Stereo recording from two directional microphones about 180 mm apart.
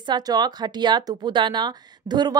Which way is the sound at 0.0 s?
25° right (ahead or behind).